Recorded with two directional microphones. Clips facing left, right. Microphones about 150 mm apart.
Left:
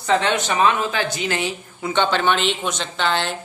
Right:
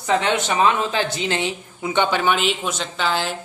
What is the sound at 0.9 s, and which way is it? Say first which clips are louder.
Speech: right 1 dB; 25° right (ahead or behind).